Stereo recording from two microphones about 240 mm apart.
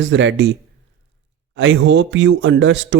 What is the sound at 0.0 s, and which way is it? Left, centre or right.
Speech, right.